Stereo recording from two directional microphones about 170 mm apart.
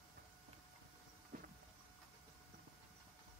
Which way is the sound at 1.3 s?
55° right (ahead or behind).